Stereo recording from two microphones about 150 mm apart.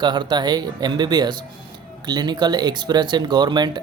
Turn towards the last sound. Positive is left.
turn(degrees=-30)  # may be behind; listen again after turning